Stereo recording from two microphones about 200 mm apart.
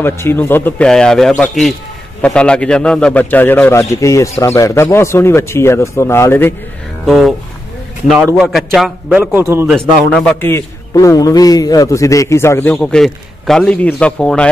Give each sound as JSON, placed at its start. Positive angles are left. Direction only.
{"t": 0.0, "sound": "a man's voice", "side_deg": 10}
{"t": 7.1, "sound": "a man's voice", "side_deg": 0}
{"t": 8.4, "sound": "a man's voice", "side_deg": 0}
{"t": 9.7, "sound": "a man's voice", "side_deg": 5}